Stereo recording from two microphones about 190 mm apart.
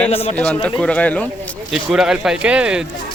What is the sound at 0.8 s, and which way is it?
A man's voice, 5° left (ahead or behind).